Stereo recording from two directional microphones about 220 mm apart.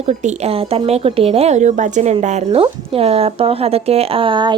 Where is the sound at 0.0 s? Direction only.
30° right (ahead or behind).